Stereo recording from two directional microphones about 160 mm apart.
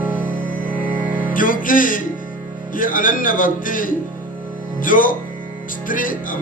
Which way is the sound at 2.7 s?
60° left (ahead or behind).